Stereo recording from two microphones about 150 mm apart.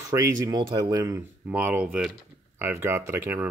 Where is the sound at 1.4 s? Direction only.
10° right (ahead or behind).